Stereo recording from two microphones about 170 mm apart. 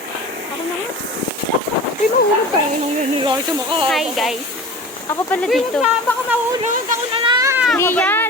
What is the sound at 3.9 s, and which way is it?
Speech, centre (ahead or behind).